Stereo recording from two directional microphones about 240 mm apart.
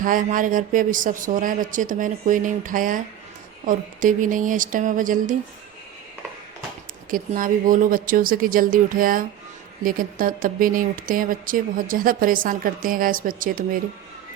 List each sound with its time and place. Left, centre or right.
0.0 s speech: right
7.1 s speech: right